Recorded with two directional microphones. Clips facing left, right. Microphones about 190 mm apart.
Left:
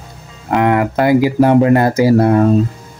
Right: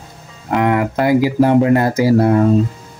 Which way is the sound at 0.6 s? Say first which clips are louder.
Left 2 dB; 60° left (ahead or behind).